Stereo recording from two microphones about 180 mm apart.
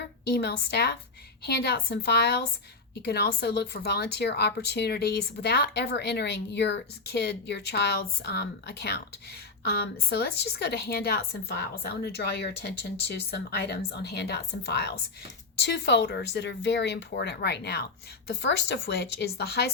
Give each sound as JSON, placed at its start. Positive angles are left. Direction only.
{"t": 0.3, "sound": "speech", "side_deg": 65}